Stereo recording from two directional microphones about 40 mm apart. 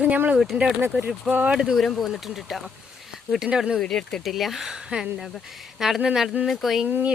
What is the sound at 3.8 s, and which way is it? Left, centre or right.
Speech, centre.